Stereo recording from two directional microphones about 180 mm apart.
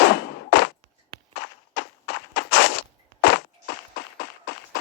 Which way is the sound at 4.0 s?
70° left (ahead or behind).